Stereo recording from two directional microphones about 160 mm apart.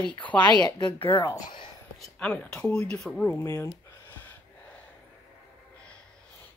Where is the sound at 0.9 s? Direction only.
15° left (ahead or behind).